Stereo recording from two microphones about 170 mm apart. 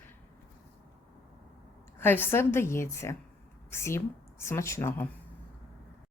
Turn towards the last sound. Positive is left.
turn(degrees=15)  # may be behind; listen again after turning